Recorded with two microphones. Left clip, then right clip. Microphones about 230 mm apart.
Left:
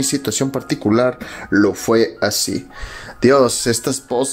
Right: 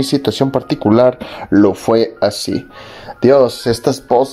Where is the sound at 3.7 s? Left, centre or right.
Left.